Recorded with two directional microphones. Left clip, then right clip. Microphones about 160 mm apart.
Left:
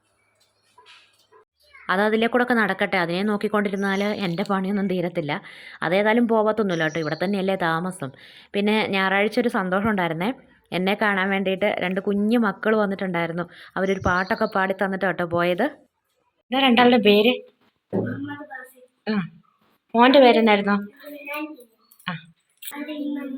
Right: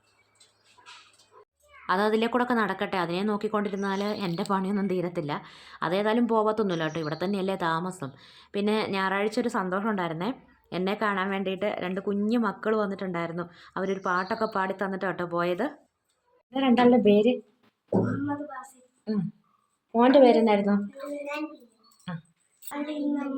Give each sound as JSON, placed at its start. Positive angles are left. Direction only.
{"t": 0.8, "sound": "dog", "side_deg": -55}
{"t": 1.9, "sound": "a woman's voice", "side_deg": 15}
{"t": 16.5, "sound": "speech", "side_deg": 5}
{"t": 19.0, "sound": "speech", "side_deg": 5}
{"t": 22.1, "sound": "speech", "side_deg": 5}